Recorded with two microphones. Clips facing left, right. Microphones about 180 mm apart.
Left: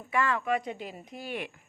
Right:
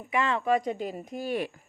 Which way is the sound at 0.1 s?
20° right (ahead or behind).